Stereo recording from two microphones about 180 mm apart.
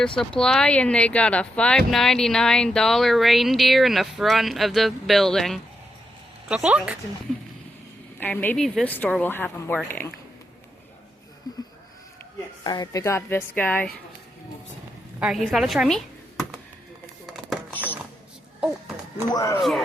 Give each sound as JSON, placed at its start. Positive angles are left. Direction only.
{"t": 0.2, "sound": "speech", "side_deg": 5}
{"t": 8.2, "sound": "speech", "side_deg": 10}
{"t": 12.6, "sound": "speech", "side_deg": 20}
{"t": 15.2, "sound": "speech", "side_deg": 0}
{"t": 17.2, "sound": "a sound", "side_deg": 0}
{"t": 19.3, "sound": "speech", "side_deg": 15}